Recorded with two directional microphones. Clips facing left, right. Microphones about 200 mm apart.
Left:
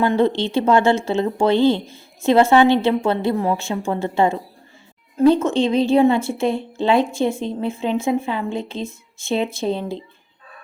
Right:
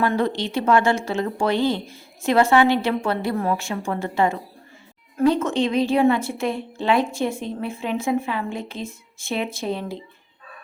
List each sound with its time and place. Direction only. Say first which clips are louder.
0.0 s speech: left 4 dB; 25° left (ahead or behind)